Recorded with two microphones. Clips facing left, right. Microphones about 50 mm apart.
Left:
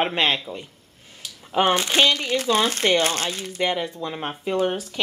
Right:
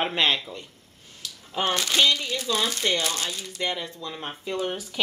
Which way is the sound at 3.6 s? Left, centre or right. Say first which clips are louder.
Left 6 dB; left.